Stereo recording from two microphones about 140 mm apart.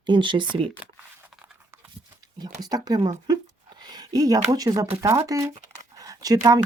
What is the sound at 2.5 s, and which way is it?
Speech, 25° right (ahead or behind).